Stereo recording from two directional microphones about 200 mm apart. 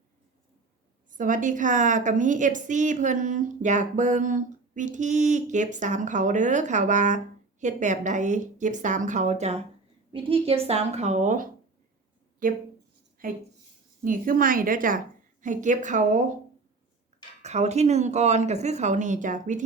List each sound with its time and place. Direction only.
1.1 s a woman's voice: 40° right (ahead or behind)
17.4 s a woman's voice: 35° right (ahead or behind)